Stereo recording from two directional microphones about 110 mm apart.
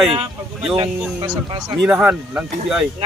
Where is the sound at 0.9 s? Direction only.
5° right (ahead or behind).